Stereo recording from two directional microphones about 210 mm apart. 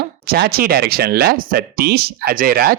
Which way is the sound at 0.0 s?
50° right (ahead or behind).